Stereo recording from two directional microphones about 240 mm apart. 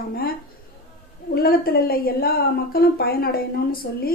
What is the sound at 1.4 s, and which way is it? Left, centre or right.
A woman's voice, left.